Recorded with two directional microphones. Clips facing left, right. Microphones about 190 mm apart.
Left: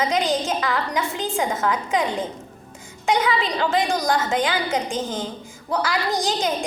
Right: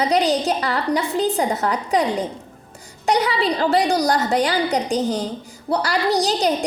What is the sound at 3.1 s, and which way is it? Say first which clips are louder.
A woman's voice: right 2 dB; 35° right (ahead or behind).